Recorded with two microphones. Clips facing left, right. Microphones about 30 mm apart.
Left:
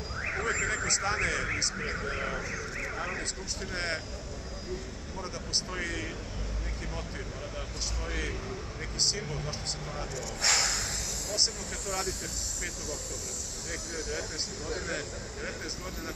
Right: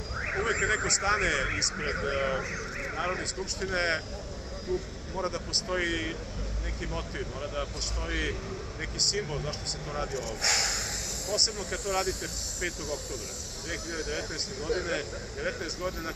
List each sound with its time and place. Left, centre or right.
0.2 s vehicle: centre
0.5 s speech: centre
2.5 s vehicle: centre
3.1 s speech: centre
5.1 s speech: centre
9.9 s speech: centre
10.4 s a sound: centre
11.3 s speech: centre
13.7 s speech: right